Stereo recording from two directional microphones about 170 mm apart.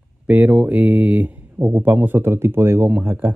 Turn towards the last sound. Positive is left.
turn(degrees=-10)  # may be behind; listen again after turning